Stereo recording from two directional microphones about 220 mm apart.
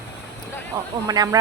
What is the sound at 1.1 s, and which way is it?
Speech, 15° right (ahead or behind).